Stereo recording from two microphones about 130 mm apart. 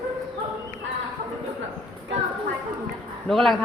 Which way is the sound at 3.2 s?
5° left (ahead or behind).